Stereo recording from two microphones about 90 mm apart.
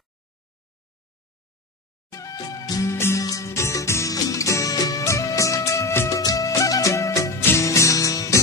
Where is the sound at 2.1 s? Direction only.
40° left (ahead or behind).